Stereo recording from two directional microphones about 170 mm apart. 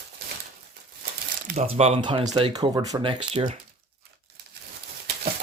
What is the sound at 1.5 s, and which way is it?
Speech, 40° right (ahead or behind).